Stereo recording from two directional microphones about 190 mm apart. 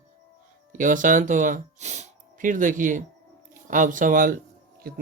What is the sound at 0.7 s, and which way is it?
Speech, 45° right (ahead or behind).